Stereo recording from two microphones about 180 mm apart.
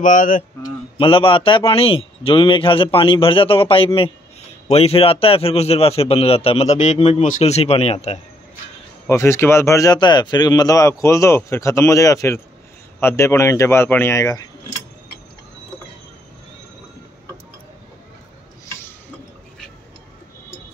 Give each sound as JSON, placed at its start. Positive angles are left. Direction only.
{"t": 0.0, "sound": "speech", "side_deg": 45}
{"t": 0.6, "sound": "a man's voice", "side_deg": 30}
{"t": 9.0, "sound": "a man's voice", "side_deg": 15}